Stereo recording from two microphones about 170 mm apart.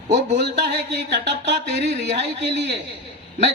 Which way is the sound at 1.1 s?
85° right.